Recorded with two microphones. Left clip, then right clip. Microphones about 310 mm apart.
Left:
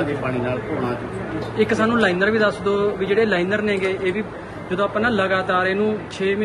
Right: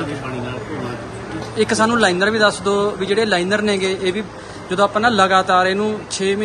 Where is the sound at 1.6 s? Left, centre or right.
Centre.